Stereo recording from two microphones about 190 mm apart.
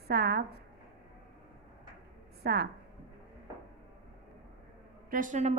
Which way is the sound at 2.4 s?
55° right (ahead or behind).